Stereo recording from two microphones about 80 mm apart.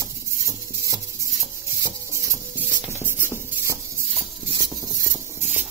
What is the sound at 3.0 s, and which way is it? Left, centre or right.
Shuffle, right.